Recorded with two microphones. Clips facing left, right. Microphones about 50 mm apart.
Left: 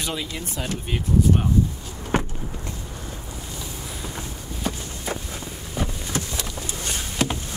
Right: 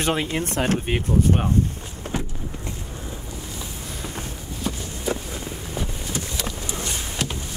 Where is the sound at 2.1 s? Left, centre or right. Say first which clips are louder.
Left 6 dB; left.